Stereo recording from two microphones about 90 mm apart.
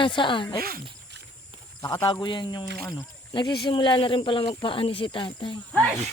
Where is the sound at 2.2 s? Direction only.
55° left (ahead or behind).